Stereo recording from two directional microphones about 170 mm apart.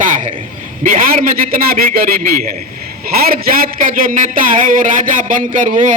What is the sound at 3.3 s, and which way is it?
Speech, 55° right (ahead or behind).